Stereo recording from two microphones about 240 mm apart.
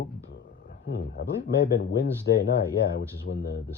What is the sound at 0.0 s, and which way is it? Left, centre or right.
Speech, left.